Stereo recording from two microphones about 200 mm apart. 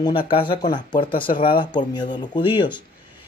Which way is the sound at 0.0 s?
25° left (ahead or behind).